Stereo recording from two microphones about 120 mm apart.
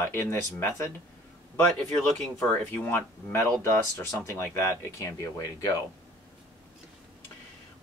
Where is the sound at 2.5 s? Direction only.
15° left (ahead or behind).